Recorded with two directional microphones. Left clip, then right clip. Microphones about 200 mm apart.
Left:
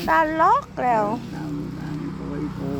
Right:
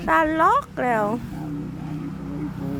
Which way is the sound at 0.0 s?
20° right (ahead or behind).